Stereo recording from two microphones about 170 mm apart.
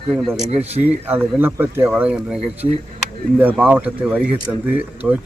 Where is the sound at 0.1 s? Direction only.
Centre (ahead or behind).